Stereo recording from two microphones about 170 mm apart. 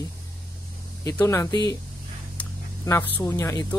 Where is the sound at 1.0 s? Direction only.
20° left (ahead or behind).